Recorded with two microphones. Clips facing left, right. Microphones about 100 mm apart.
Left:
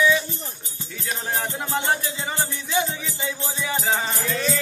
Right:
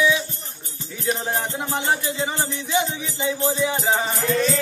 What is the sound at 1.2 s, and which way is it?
Music, 20° right (ahead or behind).